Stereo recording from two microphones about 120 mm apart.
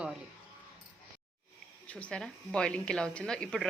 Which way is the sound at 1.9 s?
10° left (ahead or behind).